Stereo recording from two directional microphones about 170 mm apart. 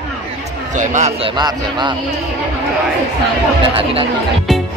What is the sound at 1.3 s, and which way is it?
Speech, 25° right (ahead or behind).